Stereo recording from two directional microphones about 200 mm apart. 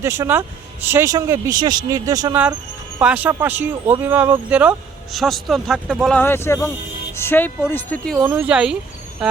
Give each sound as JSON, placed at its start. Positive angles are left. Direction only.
{"t": 0.0, "sound": "speech", "side_deg": -15}
{"t": 3.0, "sound": "a man's voice", "side_deg": -5}
{"t": 8.2, "sound": "speech", "side_deg": -10}